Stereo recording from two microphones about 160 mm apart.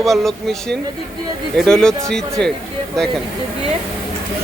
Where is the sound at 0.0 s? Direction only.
Centre (ahead or behind).